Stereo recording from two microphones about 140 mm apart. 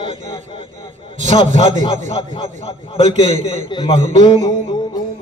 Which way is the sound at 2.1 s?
40° left (ahead or behind).